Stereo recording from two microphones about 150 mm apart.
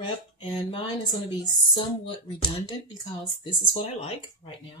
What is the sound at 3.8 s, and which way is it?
Speech, 40° left (ahead or behind).